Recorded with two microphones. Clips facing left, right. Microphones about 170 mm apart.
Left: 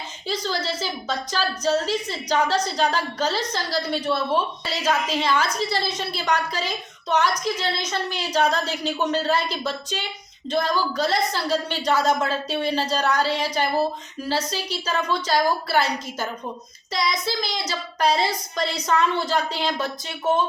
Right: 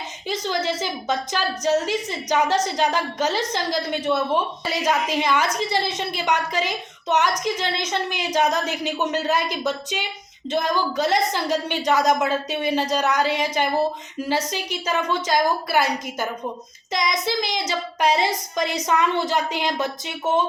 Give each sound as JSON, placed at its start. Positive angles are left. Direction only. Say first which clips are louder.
{"t": 0.3, "sound": "a woman's voice", "louder": "right 2 dB", "side_deg": -15}
{"t": 16.9, "sound": "a woman's voice", "louder": "right 2 dB", "side_deg": -15}